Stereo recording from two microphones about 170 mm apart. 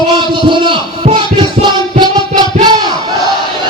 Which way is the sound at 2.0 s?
25° right (ahead or behind).